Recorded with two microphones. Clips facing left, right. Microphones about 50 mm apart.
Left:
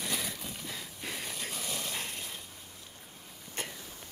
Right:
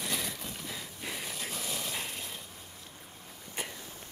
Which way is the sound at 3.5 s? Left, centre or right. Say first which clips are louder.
Even; centre.